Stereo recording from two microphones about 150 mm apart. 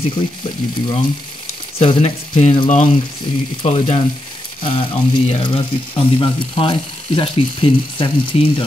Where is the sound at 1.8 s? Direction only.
40° left (ahead or behind).